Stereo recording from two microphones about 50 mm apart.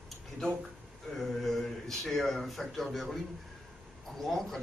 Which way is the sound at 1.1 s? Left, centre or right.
Centre.